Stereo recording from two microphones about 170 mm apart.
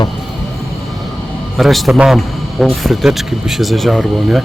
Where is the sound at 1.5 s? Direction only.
Centre (ahead or behind).